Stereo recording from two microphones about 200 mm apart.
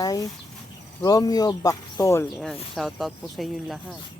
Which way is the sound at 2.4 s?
Centre (ahead or behind).